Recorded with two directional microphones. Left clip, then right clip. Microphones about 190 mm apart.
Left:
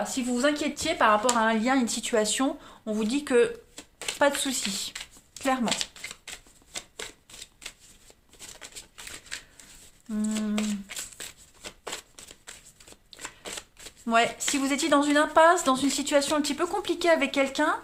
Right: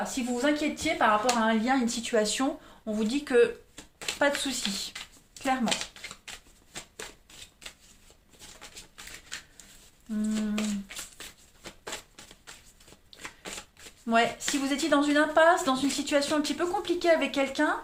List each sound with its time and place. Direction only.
0.1 s speech: 50° left (ahead or behind)
10.1 s a sound: 40° left (ahead or behind)
13.6 s shuffling cards: 40° left (ahead or behind)
14.6 s speech: 40° left (ahead or behind)